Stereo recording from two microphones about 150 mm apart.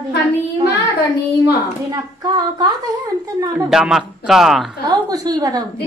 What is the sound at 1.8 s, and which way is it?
Speech, 25° right (ahead or behind).